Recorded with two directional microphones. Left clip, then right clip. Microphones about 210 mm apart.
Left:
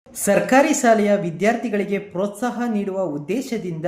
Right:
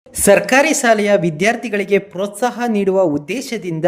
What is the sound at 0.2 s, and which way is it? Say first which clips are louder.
Speech: right 5 dB; 45° right (ahead or behind).